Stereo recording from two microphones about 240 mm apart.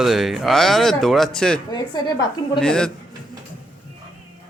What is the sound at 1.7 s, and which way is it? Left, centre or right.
Speech, centre.